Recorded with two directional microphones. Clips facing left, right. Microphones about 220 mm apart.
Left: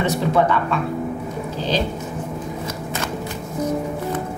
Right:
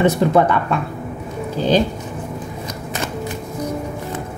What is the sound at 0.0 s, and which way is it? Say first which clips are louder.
Speech: right 4 dB; 50° right (ahead or behind).